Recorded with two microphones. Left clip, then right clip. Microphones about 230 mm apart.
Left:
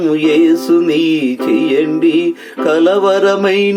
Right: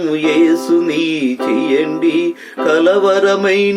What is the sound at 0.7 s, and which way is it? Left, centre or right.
Mantra, centre.